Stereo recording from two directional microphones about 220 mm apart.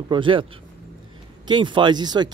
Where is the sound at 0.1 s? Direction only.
20° right (ahead or behind).